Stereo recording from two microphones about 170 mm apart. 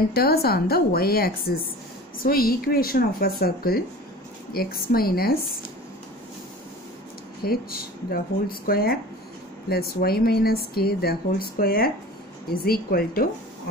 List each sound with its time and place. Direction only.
0.1 s speech: 65° left (ahead or behind)
7.4 s speech: 60° left (ahead or behind)